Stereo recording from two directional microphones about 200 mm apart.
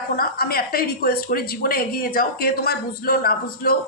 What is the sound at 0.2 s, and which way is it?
A woman's voice, 50° left (ahead or behind).